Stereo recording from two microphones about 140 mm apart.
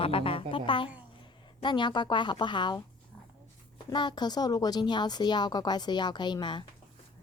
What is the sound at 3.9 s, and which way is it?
A woman's voice, 30° left (ahead or behind).